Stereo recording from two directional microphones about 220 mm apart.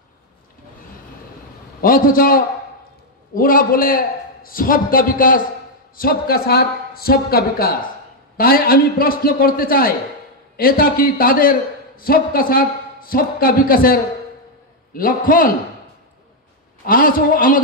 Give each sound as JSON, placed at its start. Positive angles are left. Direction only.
{"t": 1.8, "sound": "a man's voice", "side_deg": 40}
{"t": 16.8, "sound": "a man's voice", "side_deg": 40}